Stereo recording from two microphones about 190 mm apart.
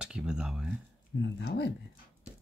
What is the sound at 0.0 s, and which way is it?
Speech, 5° right (ahead or behind).